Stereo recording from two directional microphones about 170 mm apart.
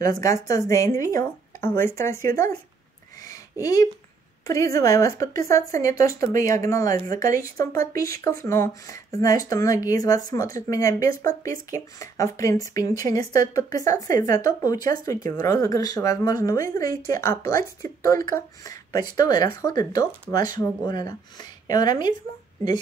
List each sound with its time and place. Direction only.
0.0 s speech: 20° left (ahead or behind)
3.6 s speech: 20° left (ahead or behind)